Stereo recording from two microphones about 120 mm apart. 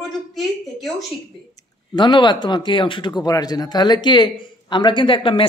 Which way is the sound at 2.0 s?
40° left (ahead or behind).